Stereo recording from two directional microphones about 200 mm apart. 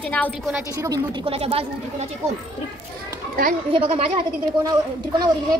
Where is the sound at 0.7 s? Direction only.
20° right (ahead or behind).